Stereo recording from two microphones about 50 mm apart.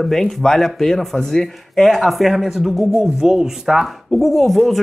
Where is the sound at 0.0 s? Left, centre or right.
Centre.